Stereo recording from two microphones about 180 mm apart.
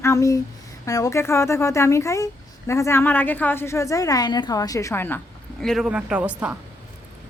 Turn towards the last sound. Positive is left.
turn(degrees=-10)  # may be behind; listen again after turning